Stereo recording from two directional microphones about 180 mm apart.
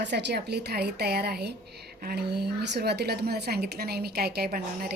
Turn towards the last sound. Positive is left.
turn(degrees=-60)  # may be behind; listen again after turning